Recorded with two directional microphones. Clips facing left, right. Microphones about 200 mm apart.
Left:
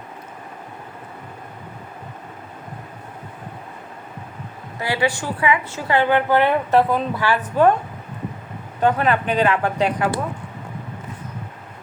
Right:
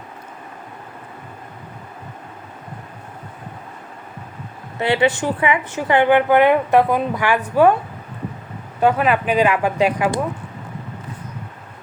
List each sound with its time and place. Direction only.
4.8 s a woman's voice: 25° right (ahead or behind)
8.8 s a woman's voice: 10° right (ahead or behind)